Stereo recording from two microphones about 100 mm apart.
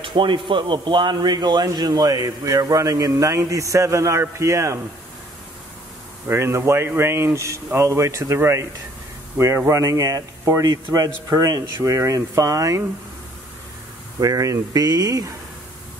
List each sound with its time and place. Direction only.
0.0 s speech: 55° right (ahead or behind); by 4.7 s 30° right (ahead or behind)
6.2 s speech: 25° right (ahead or behind)
14.2 s speech: 35° right (ahead or behind)